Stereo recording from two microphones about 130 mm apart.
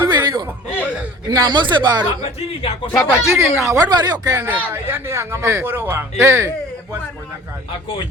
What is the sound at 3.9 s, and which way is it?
Speech, 30° right (ahead or behind).